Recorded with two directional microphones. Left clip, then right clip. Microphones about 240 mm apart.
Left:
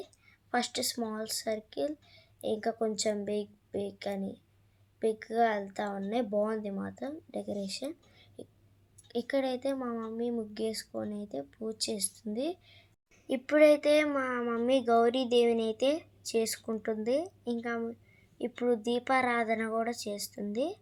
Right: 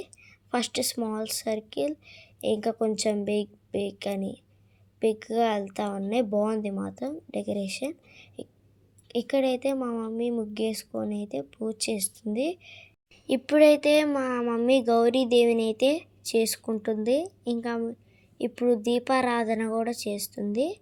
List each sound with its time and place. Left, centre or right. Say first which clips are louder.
0.0 s a woman's voice: right 5 dB; right